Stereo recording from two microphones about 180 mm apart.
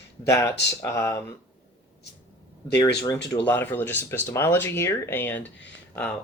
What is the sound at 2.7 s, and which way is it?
Speech, 20° left (ahead or behind).